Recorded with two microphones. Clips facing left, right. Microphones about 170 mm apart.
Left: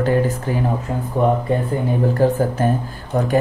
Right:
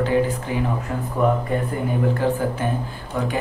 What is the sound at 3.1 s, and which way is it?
Speech, 40° left (ahead or behind).